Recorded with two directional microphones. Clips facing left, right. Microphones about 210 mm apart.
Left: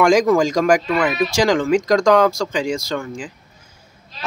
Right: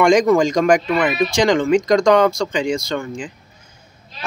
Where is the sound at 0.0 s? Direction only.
5° left (ahead or behind).